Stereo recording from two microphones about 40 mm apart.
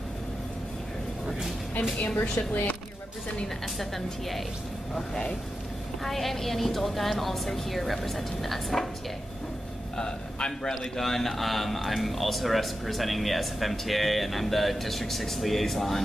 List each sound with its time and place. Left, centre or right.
2.5 s speech: left
3.7 s speech: centre
4.9 s speech: centre
6.0 s speech: centre
9.9 s a man's voice: centre
10.7 s speech: centre